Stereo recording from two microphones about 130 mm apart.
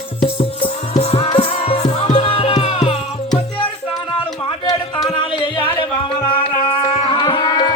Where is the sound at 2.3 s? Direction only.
45° left (ahead or behind).